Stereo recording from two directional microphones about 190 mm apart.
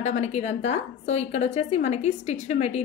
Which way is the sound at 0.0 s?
35° left (ahead or behind).